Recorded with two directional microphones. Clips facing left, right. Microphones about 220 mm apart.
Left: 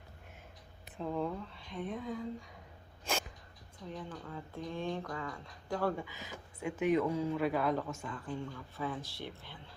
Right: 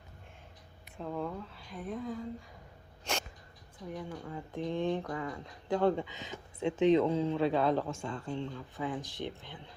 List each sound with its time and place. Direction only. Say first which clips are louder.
0.9 s speech: left 1 dB; centre (ahead or behind)
3.0 s a sound: even; centre (ahead or behind)
3.8 s speech: right 3 dB; 10° right (ahead or behind)